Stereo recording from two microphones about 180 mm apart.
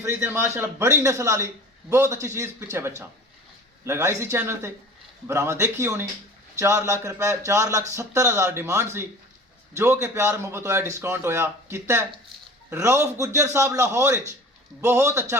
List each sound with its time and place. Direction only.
0.0 s speech: 15° right (ahead or behind)